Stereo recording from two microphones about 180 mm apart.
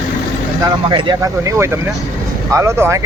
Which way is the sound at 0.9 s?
25° right (ahead or behind).